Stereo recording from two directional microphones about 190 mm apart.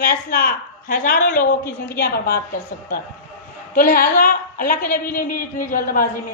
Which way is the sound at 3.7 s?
50° left (ahead or behind).